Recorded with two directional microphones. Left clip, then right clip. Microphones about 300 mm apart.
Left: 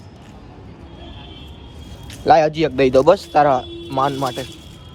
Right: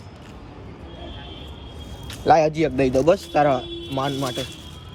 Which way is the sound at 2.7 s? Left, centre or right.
Left.